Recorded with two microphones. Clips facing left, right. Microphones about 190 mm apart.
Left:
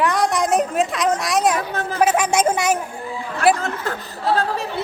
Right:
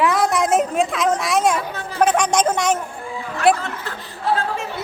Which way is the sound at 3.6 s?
45° left (ahead or behind).